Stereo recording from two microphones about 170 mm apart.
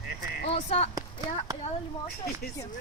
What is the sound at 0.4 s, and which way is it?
Speech, 40° left (ahead or behind).